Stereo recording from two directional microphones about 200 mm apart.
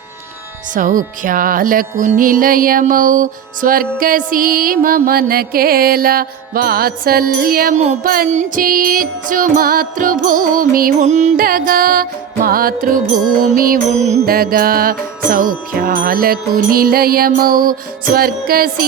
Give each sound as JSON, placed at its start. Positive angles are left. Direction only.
{"t": 0.7, "sound": "music", "side_deg": -40}